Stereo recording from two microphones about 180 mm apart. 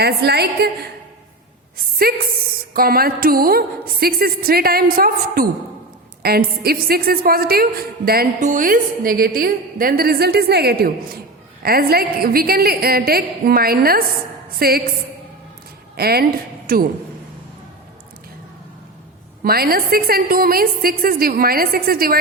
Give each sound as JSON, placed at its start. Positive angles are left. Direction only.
{"t": 0.0, "sound": "a woman's voice", "side_deg": -65}
{"t": 2.0, "sound": "a woman's voice", "side_deg": -55}
{"t": 8.4, "sound": "a woman's voice", "side_deg": -45}
{"t": 16.0, "sound": "speech", "side_deg": -60}
{"t": 19.4, "sound": "a woman's voice", "side_deg": -55}